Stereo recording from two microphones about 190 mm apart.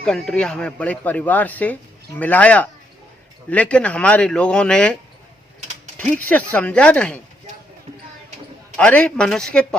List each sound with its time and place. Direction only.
0.0 s a man's voice: 5° left (ahead or behind)
6.0 s a man's voice: 10° left (ahead or behind)
8.7 s a man's voice: 5° left (ahead or behind)